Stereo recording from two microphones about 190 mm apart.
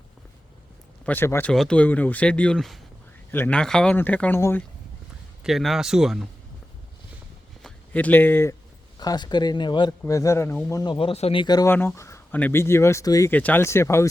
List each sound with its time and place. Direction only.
1.0 s speech: 10° left (ahead or behind)
5.4 s speech: centre (ahead or behind)
7.6 s speech: 10° left (ahead or behind)
10.9 s speech: 30° left (ahead or behind); by 14.1 s 15° left (ahead or behind)